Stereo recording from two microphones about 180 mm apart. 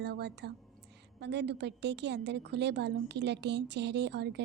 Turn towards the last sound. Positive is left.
turn(degrees=-70)  # may be behind; listen again after turning